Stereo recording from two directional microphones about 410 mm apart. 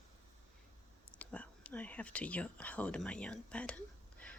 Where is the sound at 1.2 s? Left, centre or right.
Centre.